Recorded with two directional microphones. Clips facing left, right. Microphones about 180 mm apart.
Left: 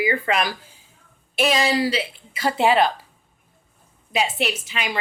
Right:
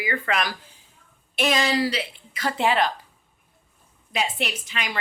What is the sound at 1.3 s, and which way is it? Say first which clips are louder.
Speech: left 3 dB; 5° left (ahead or behind).